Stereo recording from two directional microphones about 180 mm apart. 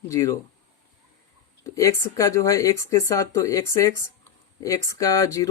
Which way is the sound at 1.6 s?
15° left (ahead or behind).